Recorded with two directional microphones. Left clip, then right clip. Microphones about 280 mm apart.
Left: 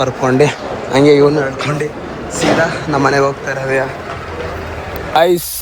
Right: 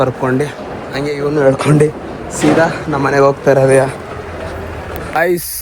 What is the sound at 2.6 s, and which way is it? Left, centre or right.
Speech, centre.